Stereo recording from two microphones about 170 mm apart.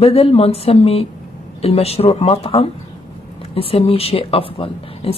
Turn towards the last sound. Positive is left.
turn(degrees=35)  # may be behind; listen again after turning